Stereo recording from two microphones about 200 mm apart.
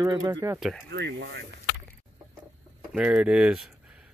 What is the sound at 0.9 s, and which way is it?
Speech, 60° right (ahead or behind).